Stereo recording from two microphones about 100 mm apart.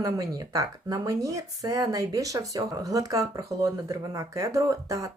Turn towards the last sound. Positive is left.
turn(degrees=-35)  # may be behind; listen again after turning